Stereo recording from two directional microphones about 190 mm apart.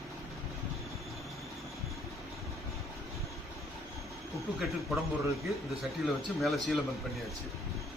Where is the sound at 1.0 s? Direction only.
Centre (ahead or behind).